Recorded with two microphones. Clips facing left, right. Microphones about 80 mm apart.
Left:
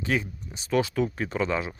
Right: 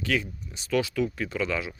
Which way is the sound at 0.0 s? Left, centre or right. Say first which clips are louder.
Even; left.